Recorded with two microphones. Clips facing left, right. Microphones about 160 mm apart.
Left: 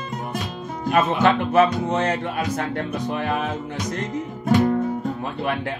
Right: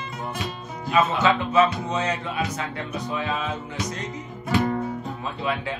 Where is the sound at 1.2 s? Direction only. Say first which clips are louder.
Left 5 dB; 55° left (ahead or behind).